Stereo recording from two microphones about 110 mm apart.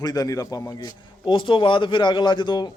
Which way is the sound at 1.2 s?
50° left (ahead or behind).